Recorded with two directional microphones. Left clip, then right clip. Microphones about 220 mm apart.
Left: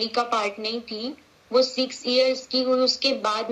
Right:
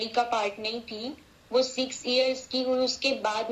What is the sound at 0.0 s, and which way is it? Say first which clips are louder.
Speech: left 3 dB; 25° left (ahead or behind).